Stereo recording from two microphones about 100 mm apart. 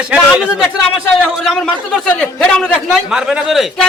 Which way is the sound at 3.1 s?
5° right (ahead or behind).